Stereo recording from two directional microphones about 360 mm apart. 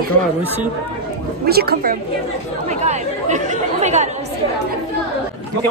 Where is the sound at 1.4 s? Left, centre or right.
Right.